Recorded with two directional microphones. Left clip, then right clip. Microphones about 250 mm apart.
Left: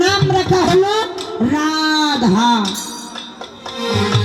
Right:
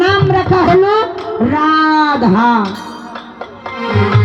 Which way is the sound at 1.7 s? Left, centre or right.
Left.